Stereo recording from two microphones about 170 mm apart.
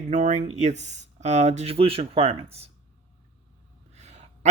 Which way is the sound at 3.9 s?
40° right (ahead or behind).